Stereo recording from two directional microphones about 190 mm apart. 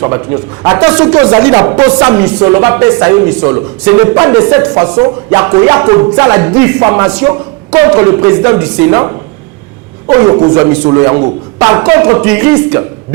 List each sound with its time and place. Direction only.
0.0 s speech: 15° right (ahead or behind)